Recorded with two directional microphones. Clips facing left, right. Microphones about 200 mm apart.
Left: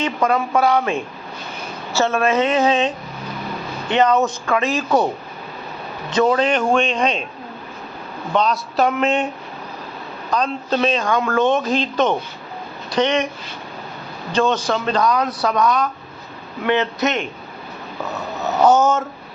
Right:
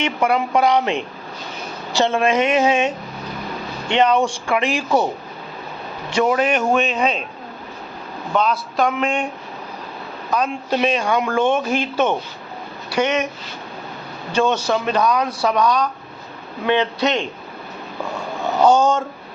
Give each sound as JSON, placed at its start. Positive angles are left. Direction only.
{"t": 0.0, "sound": "speech", "side_deg": -10}
{"t": 4.0, "sound": "speech", "side_deg": -10}
{"t": 6.1, "sound": "speech", "side_deg": -10}
{"t": 8.3, "sound": "speech", "side_deg": -5}
{"t": 10.3, "sound": "speech", "side_deg": -10}
{"t": 14.3, "sound": "speech", "side_deg": -10}
{"t": 18.3, "sound": "speech", "side_deg": 5}